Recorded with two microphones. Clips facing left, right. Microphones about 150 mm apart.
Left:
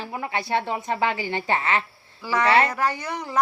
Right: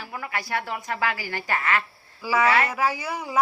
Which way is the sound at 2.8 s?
5° right (ahead or behind).